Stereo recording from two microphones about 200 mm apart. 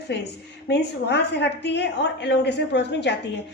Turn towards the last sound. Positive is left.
turn(degrees=60)  # may be behind; listen again after turning